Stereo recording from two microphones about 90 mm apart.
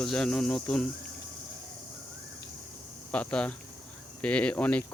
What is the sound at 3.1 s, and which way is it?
Speech, 15° left (ahead or behind).